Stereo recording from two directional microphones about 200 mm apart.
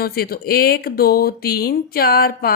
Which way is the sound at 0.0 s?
50° left (ahead or behind).